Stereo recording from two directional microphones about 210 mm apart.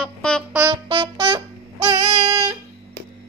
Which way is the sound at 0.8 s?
25° right (ahead or behind).